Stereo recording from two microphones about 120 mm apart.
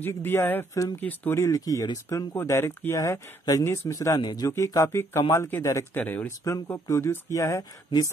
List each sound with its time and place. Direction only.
0.0 s speech: 20° left (ahead or behind)
4.2 s a man's voice: 35° left (ahead or behind)
4.5 s speech: 25° left (ahead or behind)
6.4 s speech: 25° left (ahead or behind)